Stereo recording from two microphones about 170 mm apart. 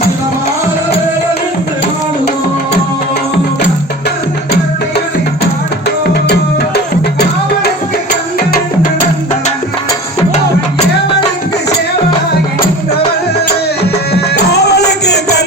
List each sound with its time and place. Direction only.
6.2 s music: 75° left (ahead or behind)
14.1 s music: 75° left (ahead or behind)